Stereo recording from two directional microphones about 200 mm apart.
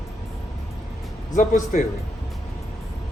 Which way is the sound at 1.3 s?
40° left (ahead or behind).